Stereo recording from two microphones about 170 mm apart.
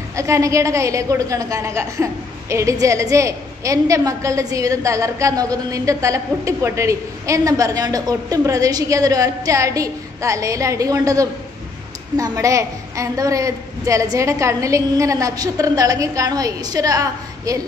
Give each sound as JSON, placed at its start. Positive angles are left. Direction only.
{"t": 0.1, "sound": "a woman's voice", "side_deg": -20}